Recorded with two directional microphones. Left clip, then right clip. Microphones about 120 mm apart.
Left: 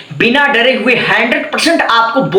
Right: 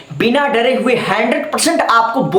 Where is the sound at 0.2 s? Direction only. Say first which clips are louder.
Left 4 dB; 40° right (ahead or behind).